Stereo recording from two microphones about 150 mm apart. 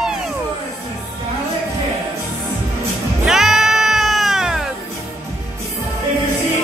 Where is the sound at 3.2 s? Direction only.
5° right (ahead or behind).